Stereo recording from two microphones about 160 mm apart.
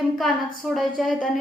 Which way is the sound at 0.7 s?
Centre (ahead or behind).